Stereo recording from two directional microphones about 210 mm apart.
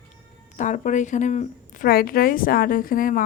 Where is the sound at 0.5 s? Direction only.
35° left (ahead or behind).